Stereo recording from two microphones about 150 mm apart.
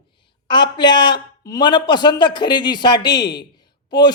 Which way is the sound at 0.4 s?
30° left (ahead or behind).